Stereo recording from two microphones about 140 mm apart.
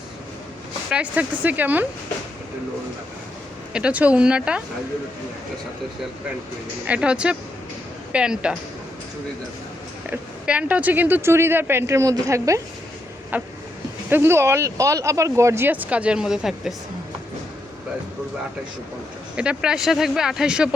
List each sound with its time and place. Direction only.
0.9 s speech: 10° right (ahead or behind)
3.7 s speech: 5° right (ahead or behind)
6.8 s speech: 10° right (ahead or behind)
10.1 s speech: 10° right (ahead or behind)
13.3 s speech: 10° right (ahead or behind)
19.4 s speech: 5° right (ahead or behind)